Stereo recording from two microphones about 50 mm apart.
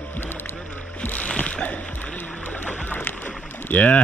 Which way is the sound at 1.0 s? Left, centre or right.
Left.